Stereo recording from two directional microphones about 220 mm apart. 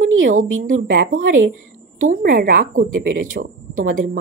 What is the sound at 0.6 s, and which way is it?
Speech, 40° right (ahead or behind).